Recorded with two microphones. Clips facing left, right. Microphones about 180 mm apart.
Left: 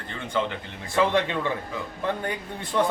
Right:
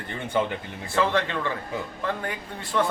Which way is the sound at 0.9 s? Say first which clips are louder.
Left 2 dB; 15° left (ahead or behind).